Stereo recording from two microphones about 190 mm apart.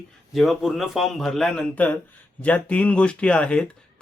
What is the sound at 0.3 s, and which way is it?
A man's voice, centre (ahead or behind).